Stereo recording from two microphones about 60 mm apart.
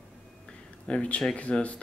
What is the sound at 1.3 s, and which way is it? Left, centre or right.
Speech, left.